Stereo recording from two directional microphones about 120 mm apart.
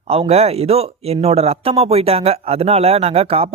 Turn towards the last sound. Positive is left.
turn(degrees=-55)  # may be behind; listen again after turning